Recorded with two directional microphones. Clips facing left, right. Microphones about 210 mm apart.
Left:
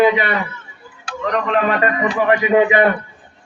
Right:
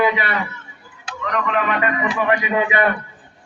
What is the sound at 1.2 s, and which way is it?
A man's voice, 35° left (ahead or behind).